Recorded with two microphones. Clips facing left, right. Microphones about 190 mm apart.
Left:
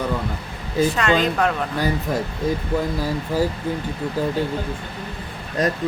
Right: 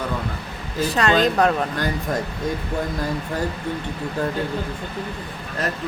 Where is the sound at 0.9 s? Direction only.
35° right (ahead or behind).